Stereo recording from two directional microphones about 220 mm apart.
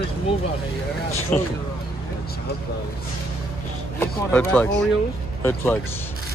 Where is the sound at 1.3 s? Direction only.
5° left (ahead or behind).